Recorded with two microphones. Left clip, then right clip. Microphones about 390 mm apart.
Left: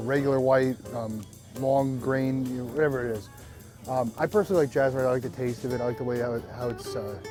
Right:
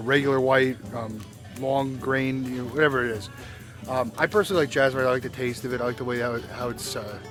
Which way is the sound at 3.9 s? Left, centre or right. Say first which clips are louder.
Right 2 dB; left.